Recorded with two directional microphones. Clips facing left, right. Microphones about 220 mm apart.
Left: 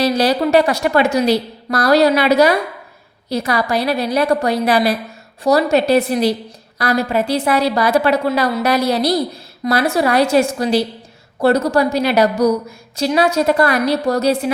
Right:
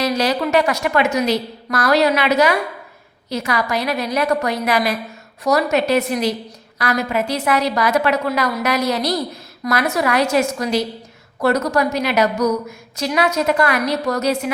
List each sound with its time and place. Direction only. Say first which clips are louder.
0.0 s a woman's voice: left 4 dB; 35° left (ahead or behind)